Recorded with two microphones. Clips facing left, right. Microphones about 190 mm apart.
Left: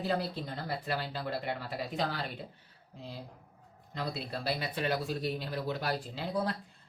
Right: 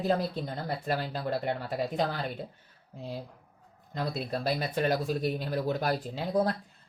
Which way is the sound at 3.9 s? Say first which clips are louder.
Right 5 dB; 45° right (ahead or behind).